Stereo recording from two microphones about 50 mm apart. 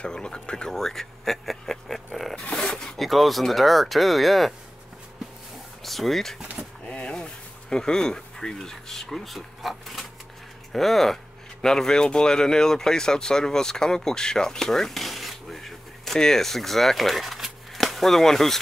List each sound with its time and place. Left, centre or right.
0.0 s speech: centre
0.7 s speech: centre
3.0 s speech: centre
5.9 s speech: centre
6.9 s a sound: left
7.7 s speech: centre